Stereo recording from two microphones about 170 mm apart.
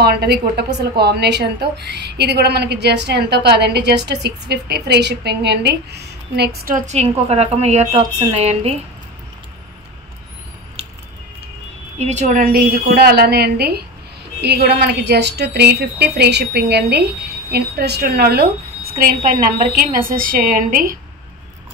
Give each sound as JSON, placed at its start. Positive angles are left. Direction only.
{"t": 0.0, "sound": "a woman's voice", "side_deg": -70}
{"t": 6.9, "sound": "a woman's voice", "side_deg": -40}
{"t": 12.0, "sound": "a woman's voice", "side_deg": -45}